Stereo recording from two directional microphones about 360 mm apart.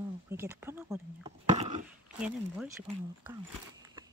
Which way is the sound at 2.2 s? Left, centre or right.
Centre.